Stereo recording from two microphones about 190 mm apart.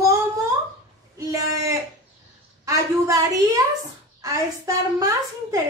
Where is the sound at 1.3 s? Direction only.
15° right (ahead or behind).